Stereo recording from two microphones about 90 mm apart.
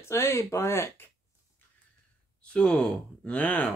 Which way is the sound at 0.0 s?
30° left (ahead or behind).